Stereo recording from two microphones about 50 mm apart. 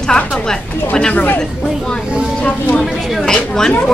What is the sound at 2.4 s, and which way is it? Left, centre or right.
Speech, left.